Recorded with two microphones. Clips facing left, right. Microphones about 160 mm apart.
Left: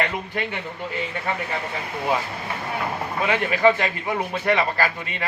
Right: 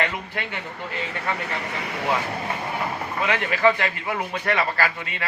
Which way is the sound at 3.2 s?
20° left (ahead or behind).